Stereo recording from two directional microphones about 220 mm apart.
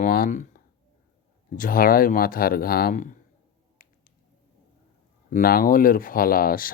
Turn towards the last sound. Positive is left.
turn(degrees=40)  # may be behind; listen again after turning